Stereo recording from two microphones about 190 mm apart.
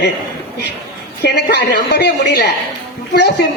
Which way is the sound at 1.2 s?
60° left (ahead or behind).